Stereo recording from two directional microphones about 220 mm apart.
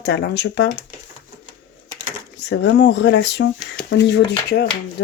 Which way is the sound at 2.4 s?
55° left (ahead or behind).